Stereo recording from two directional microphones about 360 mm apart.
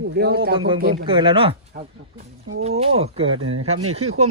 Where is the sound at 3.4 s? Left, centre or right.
Right.